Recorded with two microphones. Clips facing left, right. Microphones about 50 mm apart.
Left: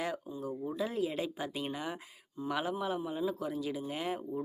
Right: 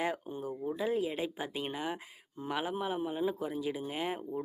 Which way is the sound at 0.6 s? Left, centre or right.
Centre.